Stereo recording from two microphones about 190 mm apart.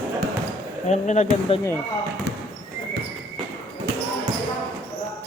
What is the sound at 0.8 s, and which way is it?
Speech, 40° left (ahead or behind).